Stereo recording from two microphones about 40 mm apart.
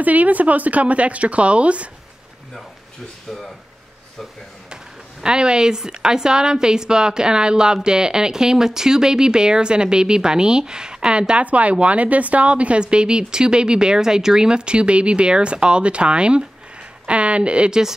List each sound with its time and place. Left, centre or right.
0.0 s speech: right
3.3 s speech: centre
5.2 s a woman's voice: right
11.4 s a woman's voice: right